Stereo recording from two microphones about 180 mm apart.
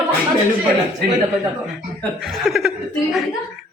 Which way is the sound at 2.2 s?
Centre (ahead or behind).